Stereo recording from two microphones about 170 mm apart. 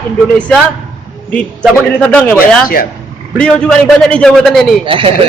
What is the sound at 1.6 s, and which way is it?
Speech, 5° left (ahead or behind).